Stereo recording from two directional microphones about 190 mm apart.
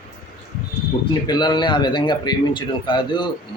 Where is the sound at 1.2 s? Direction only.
20° left (ahead or behind).